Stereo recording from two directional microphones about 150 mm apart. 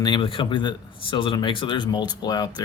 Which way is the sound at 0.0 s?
35° left (ahead or behind).